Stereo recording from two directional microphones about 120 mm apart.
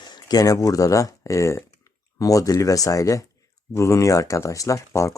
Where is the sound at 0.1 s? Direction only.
30° left (ahead or behind).